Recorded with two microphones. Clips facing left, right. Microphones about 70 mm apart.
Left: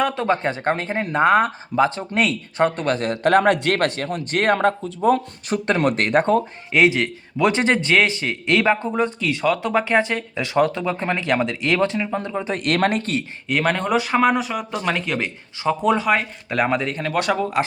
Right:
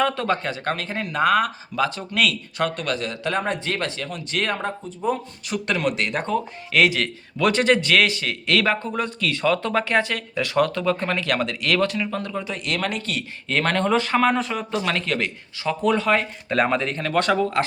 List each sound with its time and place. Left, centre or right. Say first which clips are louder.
0.0 s speech: left 2 dB; centre
0.4 s speech: left 4 dB; left
5.5 s speech: left 4 dB; left
6.7 s speech: left 2 dB; left
12.5 s speech: left 10 dB; left
13.5 s speech: left 1 dB; centre